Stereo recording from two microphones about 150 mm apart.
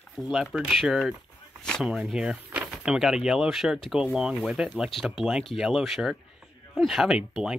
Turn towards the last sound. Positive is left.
turn(degrees=-5)  # may be behind; listen again after turning